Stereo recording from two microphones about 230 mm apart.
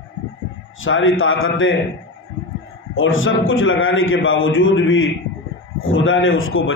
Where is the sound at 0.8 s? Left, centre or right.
Left.